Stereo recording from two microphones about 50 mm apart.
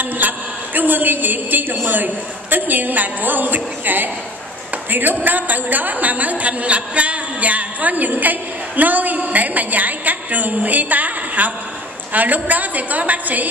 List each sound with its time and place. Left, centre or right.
0.2 s a sound: right
0.7 s a woman's voice: right
5.2 s a woman's voice: right